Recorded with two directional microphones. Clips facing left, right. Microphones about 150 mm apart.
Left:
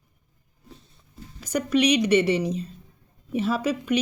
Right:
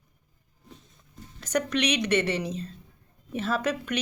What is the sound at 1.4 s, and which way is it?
Speech, 10° left (ahead or behind).